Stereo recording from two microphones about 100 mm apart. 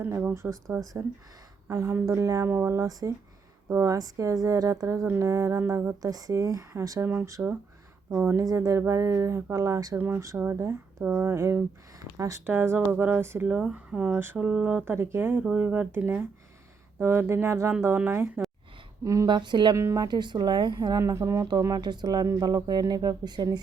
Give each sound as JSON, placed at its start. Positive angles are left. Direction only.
{"t": 0.0, "sound": "a woman's voice", "side_deg": -20}
{"t": 6.0, "sound": "a woman's voice", "side_deg": -40}
{"t": 7.0, "sound": "speech", "side_deg": -20}
{"t": 8.4, "sound": "a woman's voice", "side_deg": -30}
{"t": 10.0, "sound": "speech", "side_deg": -20}
{"t": 12.5, "sound": "speech", "side_deg": -20}
{"t": 13.5, "sound": "speech", "side_deg": -10}
{"t": 14.8, "sound": "speech", "side_deg": -25}
{"t": 19.0, "sound": "a woman's voice", "side_deg": -35}
{"t": 19.3, "sound": "speech", "side_deg": -50}
{"t": 19.7, "sound": "speech", "side_deg": -30}
{"t": 20.1, "sound": "speech", "side_deg": -45}
{"t": 21.0, "sound": "speech", "side_deg": -30}
{"t": 21.8, "sound": "a woman's voice", "side_deg": -45}